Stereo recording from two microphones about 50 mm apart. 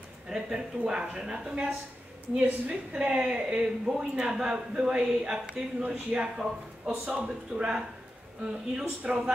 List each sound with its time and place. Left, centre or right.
0.3 s a woman's voice: centre
7.1 s a woman's voice: right